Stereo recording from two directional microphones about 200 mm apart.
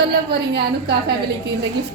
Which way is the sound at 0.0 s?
55° right (ahead or behind).